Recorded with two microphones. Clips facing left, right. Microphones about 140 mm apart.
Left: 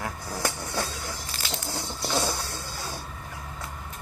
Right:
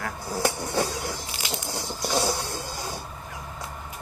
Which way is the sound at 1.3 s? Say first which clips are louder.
Right 1 dB; 15° right (ahead or behind).